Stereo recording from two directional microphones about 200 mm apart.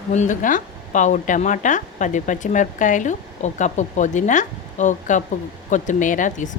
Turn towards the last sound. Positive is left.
turn(degrees=40)  # may be behind; listen again after turning